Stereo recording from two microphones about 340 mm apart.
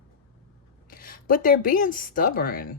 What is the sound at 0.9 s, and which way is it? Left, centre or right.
Speech, left.